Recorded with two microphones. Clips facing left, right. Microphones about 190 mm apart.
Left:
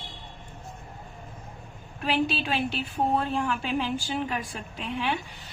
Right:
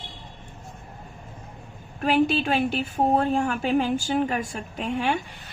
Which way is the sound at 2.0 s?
50° right (ahead or behind).